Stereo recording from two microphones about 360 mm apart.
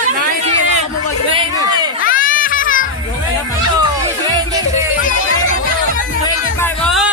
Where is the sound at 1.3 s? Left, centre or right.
Centre.